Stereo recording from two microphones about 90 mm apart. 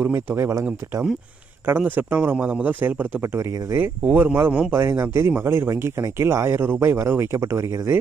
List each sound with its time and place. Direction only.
0.0 s speech: 25° right (ahead or behind)
1.8 s speech: 20° right (ahead or behind)
4.0 s speech: 15° right (ahead or behind)
4.7 s speech: 30° right (ahead or behind)